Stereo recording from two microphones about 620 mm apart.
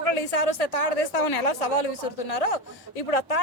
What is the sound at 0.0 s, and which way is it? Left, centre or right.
Speech, left.